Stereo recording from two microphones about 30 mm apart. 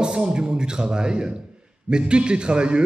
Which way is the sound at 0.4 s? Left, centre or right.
Right.